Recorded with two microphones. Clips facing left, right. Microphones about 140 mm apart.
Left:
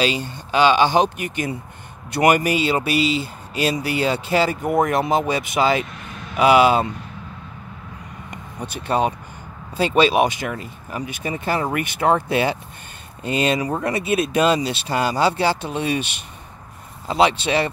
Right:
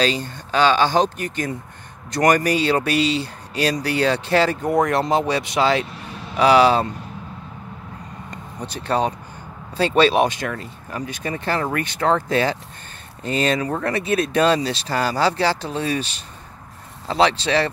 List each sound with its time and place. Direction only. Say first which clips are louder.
0.0 s speech: even; 10° left (ahead or behind)
8.8 s speech: left 1 dB; 10° left (ahead or behind)
17.1 s speech: even; 10° left (ahead or behind)